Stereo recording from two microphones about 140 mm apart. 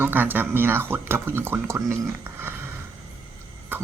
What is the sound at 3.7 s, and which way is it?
Cough, 15° right (ahead or behind).